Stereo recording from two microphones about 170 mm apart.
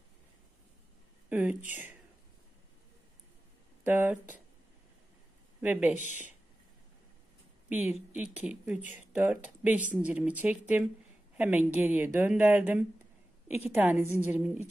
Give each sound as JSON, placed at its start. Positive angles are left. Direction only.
{"t": 1.3, "sound": "a woman's voice", "side_deg": -10}
{"t": 3.8, "sound": "a woman's voice", "side_deg": -10}
{"t": 5.6, "sound": "a woman's voice", "side_deg": -10}
{"t": 5.9, "sound": "speech", "side_deg": 45}
{"t": 8.1, "sound": "a woman's voice", "side_deg": -5}